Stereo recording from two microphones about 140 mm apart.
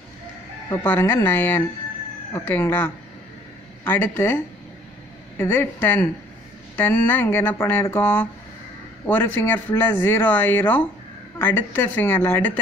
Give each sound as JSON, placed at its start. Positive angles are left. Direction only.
{"t": 0.8, "sound": "speech", "side_deg": 15}
{"t": 5.4, "sound": "speech", "side_deg": 15}